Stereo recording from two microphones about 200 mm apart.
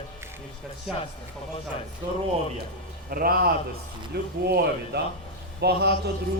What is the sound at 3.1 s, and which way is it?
A man's voice, 45° right (ahead or behind).